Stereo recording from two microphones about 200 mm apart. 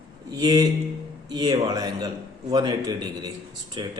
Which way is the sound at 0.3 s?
20° right (ahead or behind).